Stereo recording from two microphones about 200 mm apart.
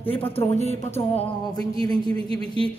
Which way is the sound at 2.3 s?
25° right (ahead or behind).